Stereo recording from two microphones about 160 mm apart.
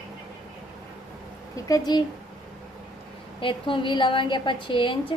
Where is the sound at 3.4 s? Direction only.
30° left (ahead or behind).